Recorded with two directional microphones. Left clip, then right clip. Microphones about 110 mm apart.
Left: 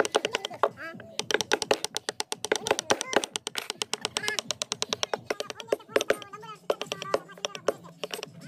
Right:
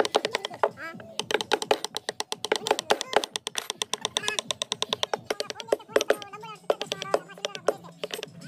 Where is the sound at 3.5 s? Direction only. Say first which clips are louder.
Right 1 dB; 40° left (ahead or behind).